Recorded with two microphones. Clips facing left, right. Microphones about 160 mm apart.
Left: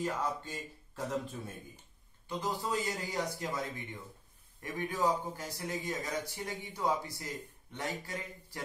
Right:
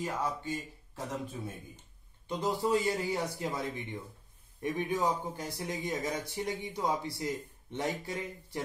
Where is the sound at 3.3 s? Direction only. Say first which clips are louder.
Right 2 dB; 15° right (ahead or behind).